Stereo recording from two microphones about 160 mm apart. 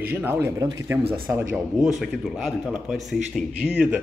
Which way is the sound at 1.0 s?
35° right (ahead or behind).